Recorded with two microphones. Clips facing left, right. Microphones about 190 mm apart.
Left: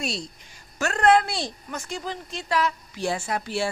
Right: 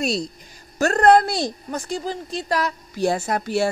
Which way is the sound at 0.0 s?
40° right (ahead or behind).